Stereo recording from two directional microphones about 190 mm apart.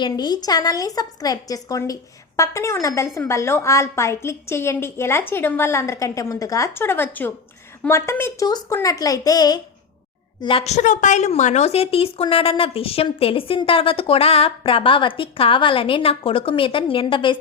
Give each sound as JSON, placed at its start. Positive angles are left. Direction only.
{"t": 0.0, "sound": "a woman's voice", "side_deg": 20}
{"t": 10.4, "sound": "a woman's voice", "side_deg": 30}